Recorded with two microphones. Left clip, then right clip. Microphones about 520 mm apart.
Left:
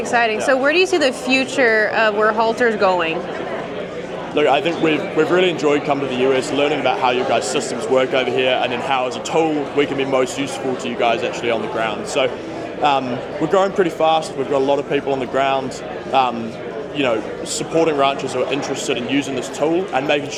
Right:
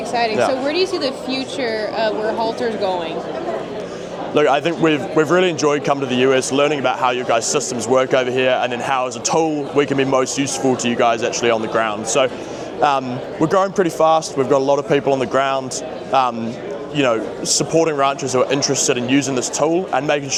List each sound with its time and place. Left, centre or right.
0.1 s a woman's voice: left
4.4 s a man's voice: right
17.6 s a man's voice: right